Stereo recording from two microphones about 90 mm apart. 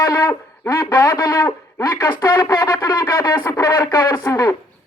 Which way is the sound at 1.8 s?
30° left (ahead or behind).